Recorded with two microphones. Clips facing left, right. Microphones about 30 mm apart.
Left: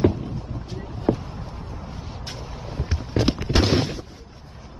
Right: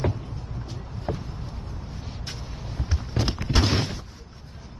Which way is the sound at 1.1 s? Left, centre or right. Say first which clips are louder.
Left 9 dB; left.